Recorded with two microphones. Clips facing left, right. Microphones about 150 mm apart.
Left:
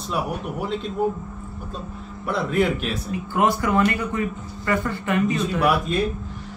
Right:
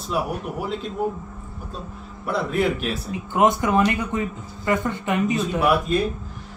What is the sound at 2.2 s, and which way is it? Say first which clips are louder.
Speech: left 1 dB; centre (ahead or behind).